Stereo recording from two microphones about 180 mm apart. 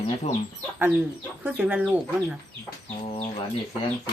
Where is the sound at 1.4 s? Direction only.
10° right (ahead or behind).